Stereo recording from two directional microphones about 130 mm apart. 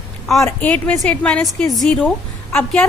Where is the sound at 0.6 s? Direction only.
10° left (ahead or behind).